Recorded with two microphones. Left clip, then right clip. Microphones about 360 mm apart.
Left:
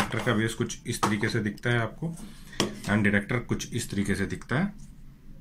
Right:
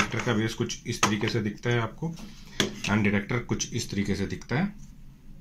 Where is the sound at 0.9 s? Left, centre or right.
Centre.